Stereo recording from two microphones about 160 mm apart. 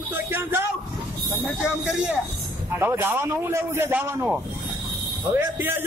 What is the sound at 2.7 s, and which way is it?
Speech, 15° right (ahead or behind).